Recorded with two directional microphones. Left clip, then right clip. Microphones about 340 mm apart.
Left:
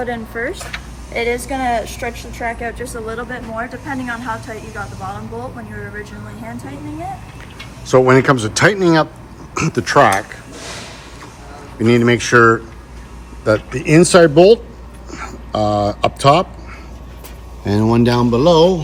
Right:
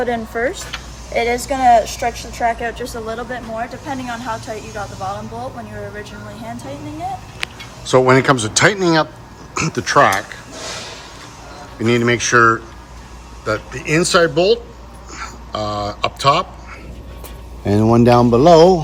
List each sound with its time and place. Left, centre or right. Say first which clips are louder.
0.0 s speech: right 3 dB; right
7.9 s speech: left 1 dB; centre
11.8 s speech: left 2 dB; centre
17.7 s speech: right 3 dB; centre